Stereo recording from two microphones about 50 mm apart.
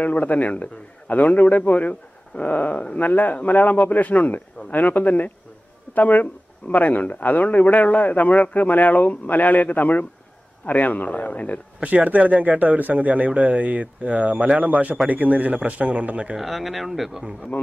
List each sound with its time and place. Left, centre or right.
0.0 s a man's voice: left
11.8 s speech: right
16.3 s speech: centre